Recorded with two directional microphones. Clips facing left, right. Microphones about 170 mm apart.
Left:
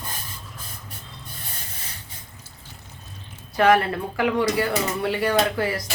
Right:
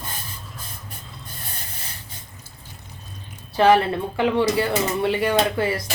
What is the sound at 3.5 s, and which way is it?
Speech, 25° right (ahead or behind).